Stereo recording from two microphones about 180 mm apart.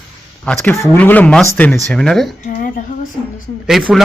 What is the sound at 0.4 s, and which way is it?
Speech, 5° left (ahead or behind).